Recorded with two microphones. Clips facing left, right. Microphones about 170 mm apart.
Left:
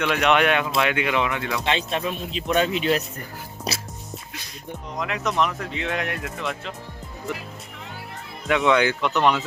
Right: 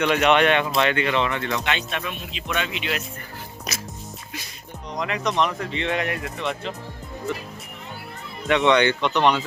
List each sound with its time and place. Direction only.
0.0 s speech: centre (ahead or behind)
1.6 s speech: 30° left (ahead or behind)
4.9 s speech: centre (ahead or behind)
8.4 s speech: centre (ahead or behind)